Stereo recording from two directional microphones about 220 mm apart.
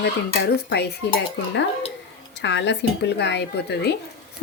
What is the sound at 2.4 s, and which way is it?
Speech, 55° left (ahead or behind).